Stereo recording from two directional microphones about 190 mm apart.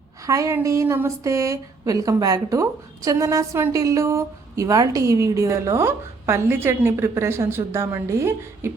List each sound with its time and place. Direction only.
0.3 s a woman's voice: 15° right (ahead or behind)